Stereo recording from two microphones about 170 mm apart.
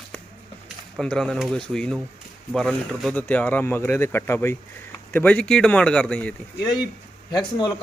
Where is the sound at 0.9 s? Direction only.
5° left (ahead or behind).